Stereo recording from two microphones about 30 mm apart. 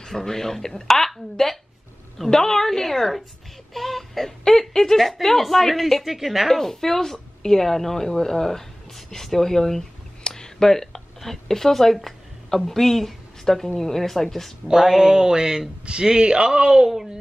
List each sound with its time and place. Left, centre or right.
0.0 s a woman's voice: centre
3.7 s a sound: centre
4.5 s a sound: centre
5.2 s a woman's voice: centre
6.0 s a woman's voice: centre
6.5 s a woman's voice: centre
14.7 s a man's voice: centre